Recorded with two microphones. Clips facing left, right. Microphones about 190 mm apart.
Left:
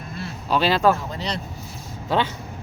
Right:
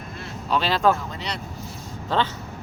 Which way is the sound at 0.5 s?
5° left (ahead or behind).